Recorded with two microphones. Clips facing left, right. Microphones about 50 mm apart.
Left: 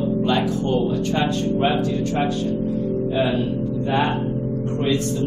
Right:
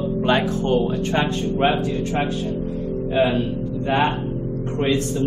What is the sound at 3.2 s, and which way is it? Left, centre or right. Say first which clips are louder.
Speech: right 4 dB; centre.